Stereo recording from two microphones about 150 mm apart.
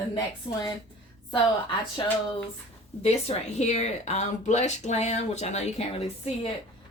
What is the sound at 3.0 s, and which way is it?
Speech, 45° left (ahead or behind).